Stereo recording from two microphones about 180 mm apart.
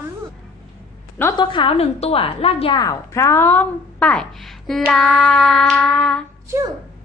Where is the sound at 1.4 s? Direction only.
30° left (ahead or behind); by 6.2 s 5° left (ahead or behind).